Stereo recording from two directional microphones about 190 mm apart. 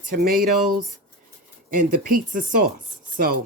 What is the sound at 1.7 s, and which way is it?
Speech, 50° right (ahead or behind).